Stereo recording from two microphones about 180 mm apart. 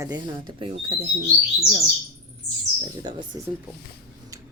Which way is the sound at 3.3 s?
20° right (ahead or behind).